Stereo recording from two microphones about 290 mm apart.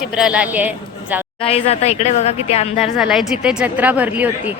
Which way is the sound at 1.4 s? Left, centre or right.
Left.